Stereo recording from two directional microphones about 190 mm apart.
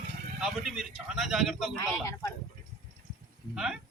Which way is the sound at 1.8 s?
15° left (ahead or behind).